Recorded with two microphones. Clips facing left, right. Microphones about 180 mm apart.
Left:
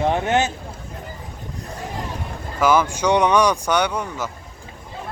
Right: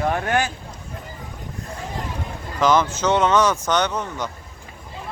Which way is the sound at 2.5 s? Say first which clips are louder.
Left 1 dB; 10° left (ahead or behind).